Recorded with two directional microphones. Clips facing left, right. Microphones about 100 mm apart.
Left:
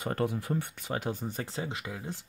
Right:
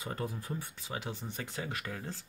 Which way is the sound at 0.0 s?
65° left (ahead or behind).